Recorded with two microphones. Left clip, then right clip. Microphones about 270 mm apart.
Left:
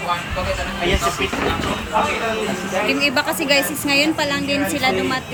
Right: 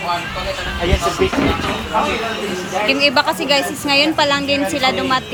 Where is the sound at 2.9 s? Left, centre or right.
Centre.